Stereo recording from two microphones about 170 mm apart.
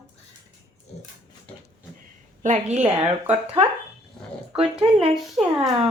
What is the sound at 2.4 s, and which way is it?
Speech, 45° right (ahead or behind).